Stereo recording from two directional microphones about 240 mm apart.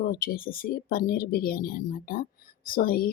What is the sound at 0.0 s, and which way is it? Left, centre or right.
Speech, left.